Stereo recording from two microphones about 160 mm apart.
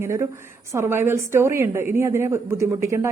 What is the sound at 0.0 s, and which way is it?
A woman's voice, 15° right (ahead or behind).